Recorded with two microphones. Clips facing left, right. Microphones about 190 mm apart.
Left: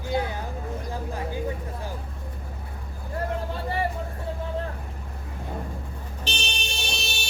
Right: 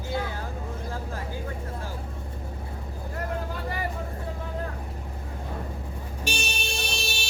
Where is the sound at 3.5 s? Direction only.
30° left (ahead or behind).